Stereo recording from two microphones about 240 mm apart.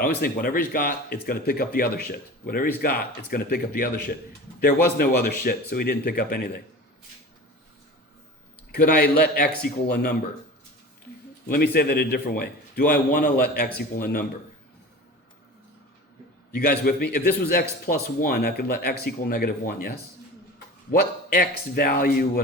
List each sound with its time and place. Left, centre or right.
0.0 s speech: left
8.7 s speech: left
11.4 s speech: left
16.5 s speech: left
20.9 s speech: left